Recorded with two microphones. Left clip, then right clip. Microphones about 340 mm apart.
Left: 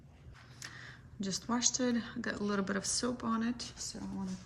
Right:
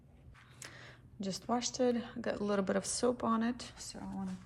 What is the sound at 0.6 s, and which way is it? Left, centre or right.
Speech, centre.